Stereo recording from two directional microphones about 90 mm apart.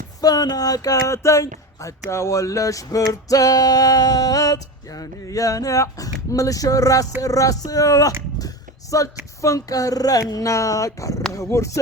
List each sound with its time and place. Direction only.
0.2 s music: 45° left (ahead or behind)
2.0 s male singing: 35° left (ahead or behind)
8.4 s a sound: 40° left (ahead or behind)
9.4 s male singing: 40° left (ahead or behind)